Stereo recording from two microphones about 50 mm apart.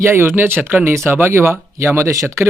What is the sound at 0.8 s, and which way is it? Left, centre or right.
Speech, right.